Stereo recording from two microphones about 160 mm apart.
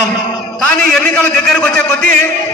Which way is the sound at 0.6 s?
5° left (ahead or behind).